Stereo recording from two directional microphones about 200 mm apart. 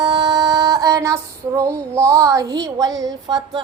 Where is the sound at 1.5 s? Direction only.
15° right (ahead or behind).